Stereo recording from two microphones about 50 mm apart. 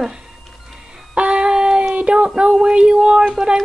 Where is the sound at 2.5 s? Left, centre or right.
Centre.